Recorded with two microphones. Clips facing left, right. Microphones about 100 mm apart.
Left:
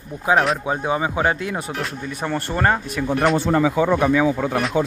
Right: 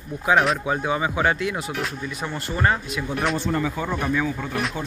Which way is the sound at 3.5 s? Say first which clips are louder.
Left 8 dB; 90° left.